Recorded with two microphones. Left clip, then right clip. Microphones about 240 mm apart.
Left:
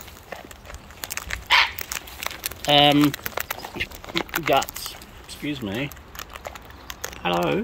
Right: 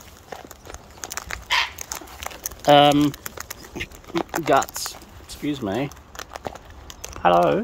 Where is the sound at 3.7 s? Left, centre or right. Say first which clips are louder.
Right 1 dB; centre.